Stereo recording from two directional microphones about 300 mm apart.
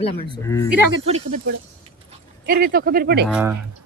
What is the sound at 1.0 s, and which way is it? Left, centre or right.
Speech, right.